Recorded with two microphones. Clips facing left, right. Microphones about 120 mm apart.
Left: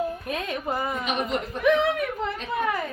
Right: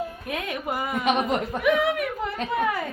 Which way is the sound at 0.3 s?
15° right (ahead or behind).